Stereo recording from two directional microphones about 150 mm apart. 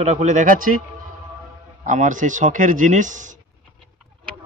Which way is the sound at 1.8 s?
60° right (ahead or behind).